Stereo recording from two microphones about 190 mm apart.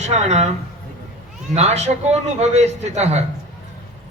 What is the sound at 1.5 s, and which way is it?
A man's voice, 35° right (ahead or behind).